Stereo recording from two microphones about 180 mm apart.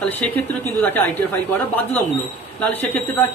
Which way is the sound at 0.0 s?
10° left (ahead or behind).